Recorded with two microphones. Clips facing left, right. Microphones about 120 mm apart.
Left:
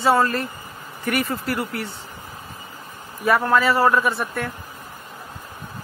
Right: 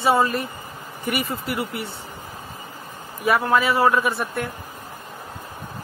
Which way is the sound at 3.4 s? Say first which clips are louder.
Left 1 dB; 15° right (ahead or behind).